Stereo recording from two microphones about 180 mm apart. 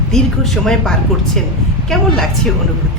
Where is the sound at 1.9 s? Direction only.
Centre (ahead or behind).